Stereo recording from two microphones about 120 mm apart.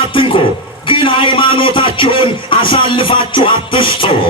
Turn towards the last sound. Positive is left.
turn(degrees=45)  # may be behind; listen again after turning